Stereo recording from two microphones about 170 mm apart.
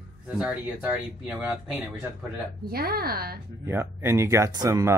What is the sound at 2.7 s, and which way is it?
Speech, 65° right (ahead or behind).